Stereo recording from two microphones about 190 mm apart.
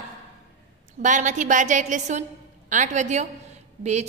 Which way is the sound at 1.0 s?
40° right (ahead or behind).